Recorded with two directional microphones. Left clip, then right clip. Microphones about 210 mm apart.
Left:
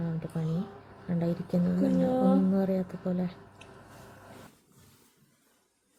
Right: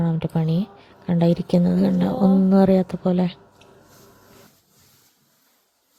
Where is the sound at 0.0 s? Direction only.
40° right (ahead or behind).